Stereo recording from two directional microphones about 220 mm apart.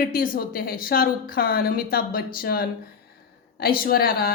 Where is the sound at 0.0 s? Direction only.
40° left (ahead or behind).